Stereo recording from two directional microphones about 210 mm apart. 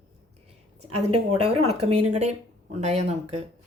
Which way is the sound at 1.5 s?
30° right (ahead or behind).